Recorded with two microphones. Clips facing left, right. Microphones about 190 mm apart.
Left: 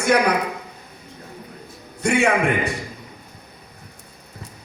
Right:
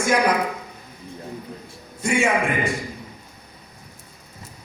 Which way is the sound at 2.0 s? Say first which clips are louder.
Left 2 dB; 65° left (ahead or behind).